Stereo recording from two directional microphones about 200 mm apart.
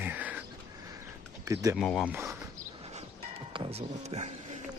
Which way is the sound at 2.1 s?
15° right (ahead or behind).